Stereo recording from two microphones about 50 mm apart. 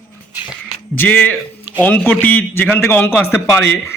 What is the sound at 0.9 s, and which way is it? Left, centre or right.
A man's voice, left.